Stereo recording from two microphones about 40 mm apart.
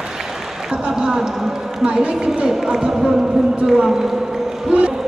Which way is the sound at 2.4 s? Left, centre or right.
Centre.